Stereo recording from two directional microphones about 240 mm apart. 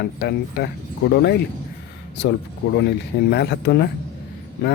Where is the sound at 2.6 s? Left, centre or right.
Left.